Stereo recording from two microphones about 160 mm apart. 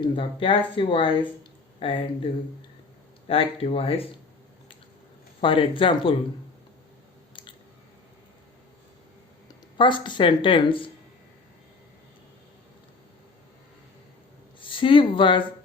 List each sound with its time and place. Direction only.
0.0 s speech: 35° left (ahead or behind)
3.2 s speech: 40° left (ahead or behind)
5.4 s speech: 35° left (ahead or behind)
9.7 s speech: 30° left (ahead or behind)
14.6 s speech: 30° left (ahead or behind)